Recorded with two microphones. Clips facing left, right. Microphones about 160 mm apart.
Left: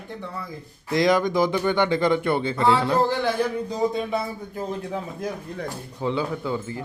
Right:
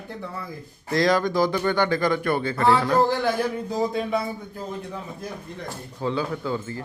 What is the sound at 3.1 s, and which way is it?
Speech, 10° right (ahead or behind).